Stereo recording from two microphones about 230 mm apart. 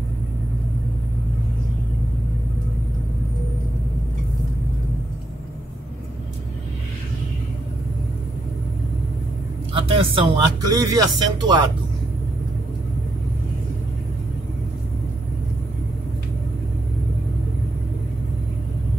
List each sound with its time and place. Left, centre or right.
9.8 s speech: right